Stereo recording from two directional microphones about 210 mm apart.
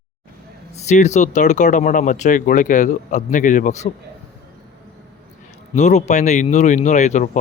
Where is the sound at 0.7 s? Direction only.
35° left (ahead or behind).